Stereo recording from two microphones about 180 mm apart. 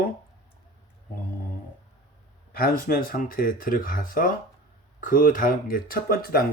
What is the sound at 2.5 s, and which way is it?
Speech, 55° left (ahead or behind).